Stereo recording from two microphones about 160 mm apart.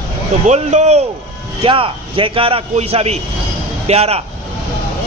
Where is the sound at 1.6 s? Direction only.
35° right (ahead or behind).